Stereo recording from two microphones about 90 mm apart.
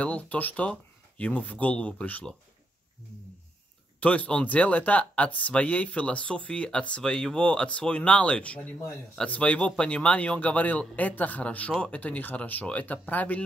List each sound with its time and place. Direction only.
0.0 s speech: 15° left (ahead or behind)
4.0 s speech: 15° left (ahead or behind)